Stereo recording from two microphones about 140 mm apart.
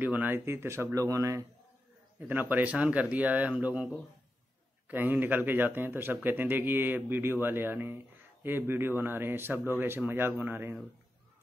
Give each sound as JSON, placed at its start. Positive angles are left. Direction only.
{"t": 0.0, "sound": "speech", "side_deg": -15}